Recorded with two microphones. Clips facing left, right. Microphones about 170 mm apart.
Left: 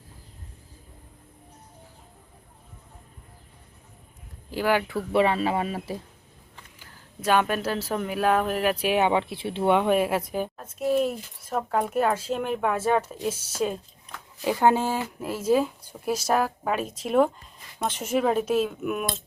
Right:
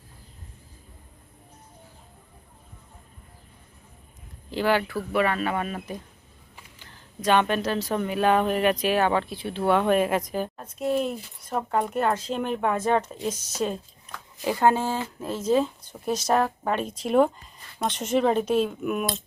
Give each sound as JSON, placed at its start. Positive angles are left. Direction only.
{"t": 4.5, "sound": "speech", "side_deg": 10}
{"t": 4.9, "sound": "speech", "side_deg": 25}
{"t": 6.7, "sound": "speech", "side_deg": 10}